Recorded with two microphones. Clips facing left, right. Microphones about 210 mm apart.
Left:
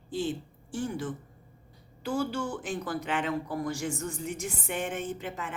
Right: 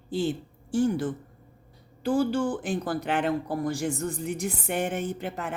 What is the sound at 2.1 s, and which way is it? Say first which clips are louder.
A woman's voice: right 6 dB; 30° right (ahead or behind).